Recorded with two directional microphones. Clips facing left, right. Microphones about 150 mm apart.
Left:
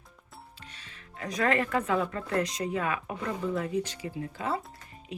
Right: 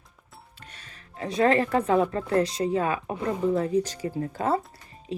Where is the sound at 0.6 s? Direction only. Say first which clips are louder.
Right 1 dB; 50° right (ahead or behind).